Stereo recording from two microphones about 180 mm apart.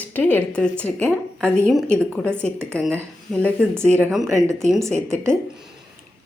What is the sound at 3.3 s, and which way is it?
A woman's voice, centre (ahead or behind).